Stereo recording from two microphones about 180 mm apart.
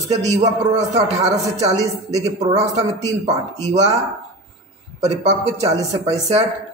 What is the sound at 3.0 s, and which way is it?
Speech, 40° right (ahead or behind).